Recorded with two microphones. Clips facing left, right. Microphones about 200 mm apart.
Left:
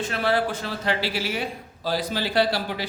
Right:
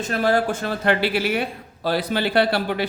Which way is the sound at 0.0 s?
45° right (ahead or behind).